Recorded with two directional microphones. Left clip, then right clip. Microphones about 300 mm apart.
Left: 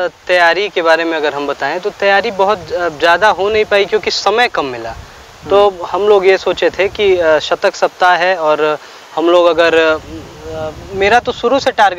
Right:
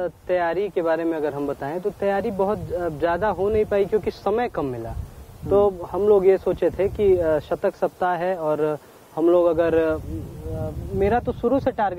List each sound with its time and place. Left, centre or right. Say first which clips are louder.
0.0 s speech: left 12 dB; centre